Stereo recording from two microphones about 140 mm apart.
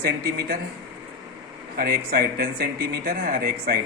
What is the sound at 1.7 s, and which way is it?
A man's voice, 90° right.